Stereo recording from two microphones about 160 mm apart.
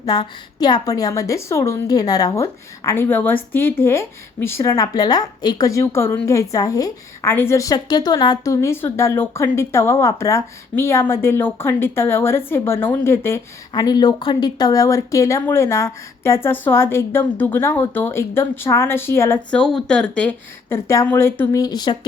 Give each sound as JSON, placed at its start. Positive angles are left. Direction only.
{"t": 0.0, "sound": "a woman's voice", "side_deg": 25}